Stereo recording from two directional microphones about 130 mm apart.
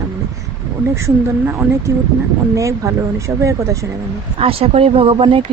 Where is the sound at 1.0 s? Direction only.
20° right (ahead or behind).